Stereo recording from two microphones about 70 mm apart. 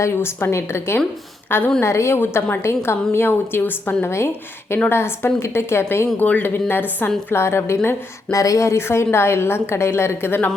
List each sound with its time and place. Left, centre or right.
0.0 s a woman's voice: left
1.8 s a woman's voice: left
6.1 s a woman's voice: left
8.3 s a woman's voice: left